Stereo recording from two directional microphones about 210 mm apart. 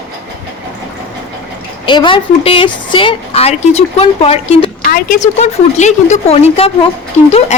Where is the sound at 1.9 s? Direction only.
25° left (ahead or behind).